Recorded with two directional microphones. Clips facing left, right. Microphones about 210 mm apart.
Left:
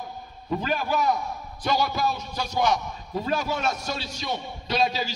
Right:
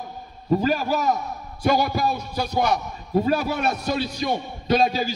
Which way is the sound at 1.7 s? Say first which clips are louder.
Right 4 dB; 55° right (ahead or behind).